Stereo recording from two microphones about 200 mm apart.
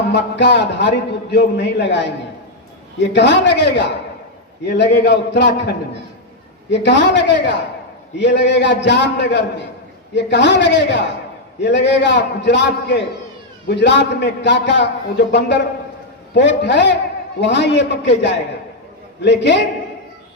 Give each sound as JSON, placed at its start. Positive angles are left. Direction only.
{"t": 0.1, "sound": "a man's voice", "side_deg": 60}